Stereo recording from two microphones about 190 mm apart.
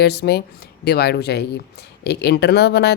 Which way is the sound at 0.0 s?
60° left (ahead or behind).